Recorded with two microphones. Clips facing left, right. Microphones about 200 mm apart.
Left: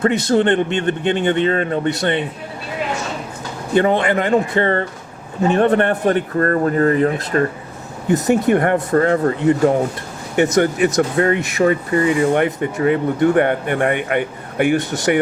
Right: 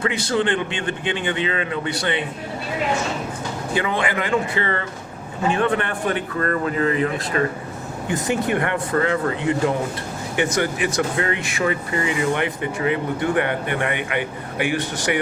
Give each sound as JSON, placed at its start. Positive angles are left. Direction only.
{"t": 0.0, "sound": "speech", "side_deg": 45}
{"t": 0.8, "sound": "speech", "side_deg": 60}
{"t": 3.8, "sound": "speech", "side_deg": 45}